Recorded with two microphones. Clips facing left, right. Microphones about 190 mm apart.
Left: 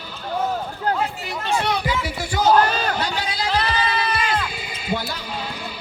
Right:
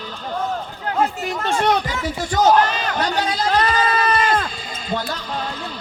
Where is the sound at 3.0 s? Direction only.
45° right (ahead or behind).